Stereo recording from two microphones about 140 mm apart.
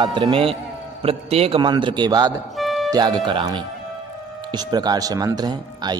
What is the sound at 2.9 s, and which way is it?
Speech, 30° right (ahead or behind).